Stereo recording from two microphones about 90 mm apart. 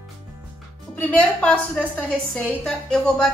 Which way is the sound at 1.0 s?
15° left (ahead or behind).